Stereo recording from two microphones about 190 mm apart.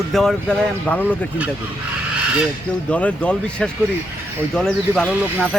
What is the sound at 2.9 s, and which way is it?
Speech, 5° left (ahead or behind).